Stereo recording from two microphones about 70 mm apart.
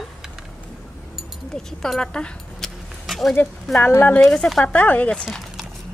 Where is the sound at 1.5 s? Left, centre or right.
Centre.